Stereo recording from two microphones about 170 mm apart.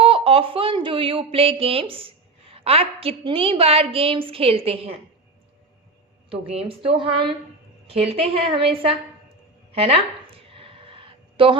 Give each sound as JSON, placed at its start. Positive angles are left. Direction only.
{"t": 0.0, "sound": "speech", "side_deg": -30}
{"t": 6.3, "sound": "a woman's voice", "side_deg": -35}
{"t": 9.7, "sound": "a sound", "side_deg": -35}